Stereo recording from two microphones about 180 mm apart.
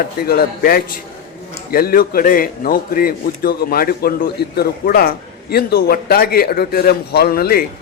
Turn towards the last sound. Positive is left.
turn(degrees=55)  # may be behind; listen again after turning